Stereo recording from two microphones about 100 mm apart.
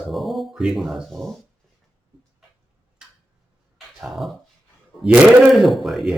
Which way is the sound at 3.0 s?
5° right (ahead or behind).